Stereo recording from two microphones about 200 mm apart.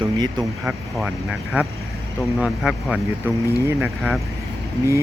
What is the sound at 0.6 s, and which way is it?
Speech, 5° right (ahead or behind).